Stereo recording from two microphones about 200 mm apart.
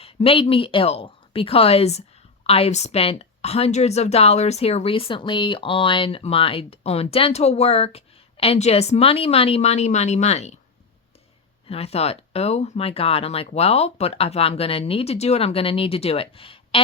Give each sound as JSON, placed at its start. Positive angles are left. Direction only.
{"t": 0.0, "sound": "speech", "side_deg": 30}
{"t": 11.7, "sound": "speech", "side_deg": 30}